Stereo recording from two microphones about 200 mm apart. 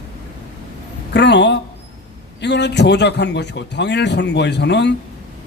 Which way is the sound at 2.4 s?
60° left (ahead or behind).